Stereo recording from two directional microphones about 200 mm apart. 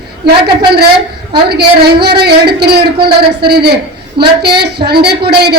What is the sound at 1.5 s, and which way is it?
A woman's voice, 55° right (ahead or behind).